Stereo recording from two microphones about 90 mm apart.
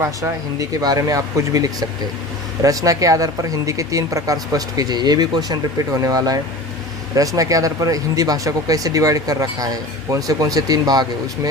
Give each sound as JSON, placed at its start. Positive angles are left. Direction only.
{"t": 0.0, "sound": "speech", "side_deg": -40}